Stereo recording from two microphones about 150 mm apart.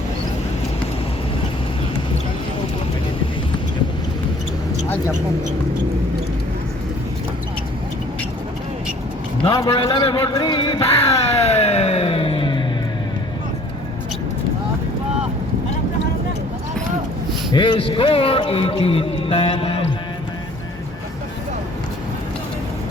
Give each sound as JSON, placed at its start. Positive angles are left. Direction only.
{"t": 9.6, "sound": "a man's voice", "side_deg": 35}
{"t": 10.3, "sound": "music", "side_deg": 30}
{"t": 17.5, "sound": "speech", "side_deg": 35}